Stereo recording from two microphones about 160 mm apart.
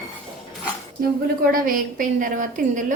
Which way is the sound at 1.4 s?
60° right (ahead or behind).